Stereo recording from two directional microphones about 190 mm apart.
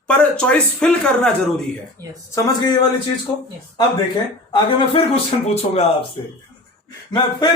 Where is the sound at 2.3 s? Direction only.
15° left (ahead or behind).